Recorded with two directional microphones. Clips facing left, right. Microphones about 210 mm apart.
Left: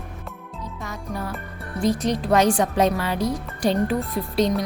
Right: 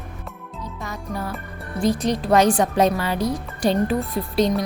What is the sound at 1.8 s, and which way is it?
A woman's voice, 30° right (ahead or behind).